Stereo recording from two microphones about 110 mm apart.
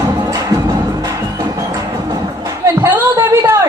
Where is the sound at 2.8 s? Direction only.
20° right (ahead or behind).